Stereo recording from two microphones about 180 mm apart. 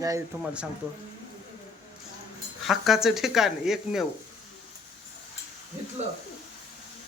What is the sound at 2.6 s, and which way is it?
Speech, centre (ahead or behind).